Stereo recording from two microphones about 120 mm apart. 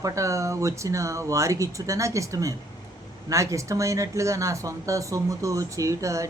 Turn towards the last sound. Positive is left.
turn(degrees=-25)  # may be behind; listen again after turning